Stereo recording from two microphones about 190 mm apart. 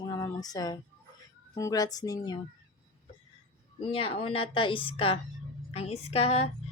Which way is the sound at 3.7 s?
30° left (ahead or behind).